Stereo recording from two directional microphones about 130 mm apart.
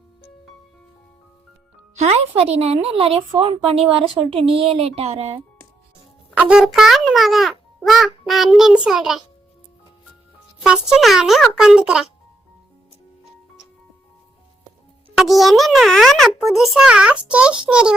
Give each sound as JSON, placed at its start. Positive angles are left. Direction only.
{"t": 2.0, "sound": "speech", "side_deg": -55}
{"t": 6.4, "sound": "a child's voice", "side_deg": -5}
{"t": 10.6, "sound": "a child's voice", "side_deg": -5}
{"t": 15.1, "sound": "a child's voice", "side_deg": 0}